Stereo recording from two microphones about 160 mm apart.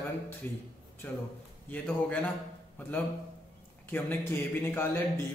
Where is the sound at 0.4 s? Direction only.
10° left (ahead or behind).